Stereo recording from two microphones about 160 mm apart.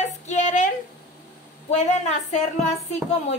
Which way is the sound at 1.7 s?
45° left (ahead or behind).